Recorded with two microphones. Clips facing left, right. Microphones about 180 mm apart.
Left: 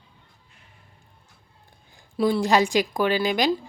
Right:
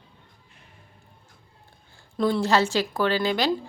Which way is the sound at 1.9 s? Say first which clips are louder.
Left 1 dB; 15° left (ahead or behind).